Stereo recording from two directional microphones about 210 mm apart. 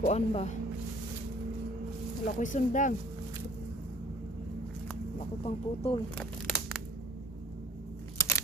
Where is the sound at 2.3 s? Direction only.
35° left (ahead or behind).